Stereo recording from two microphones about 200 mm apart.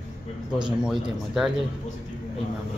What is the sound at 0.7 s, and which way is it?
Speech, centre (ahead or behind).